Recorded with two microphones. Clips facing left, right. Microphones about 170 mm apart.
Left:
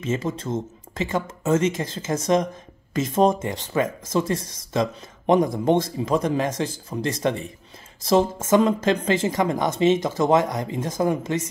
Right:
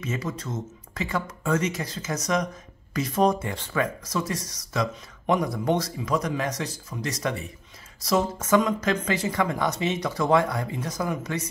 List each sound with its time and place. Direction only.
0.0 s speech: 25° left (ahead or behind)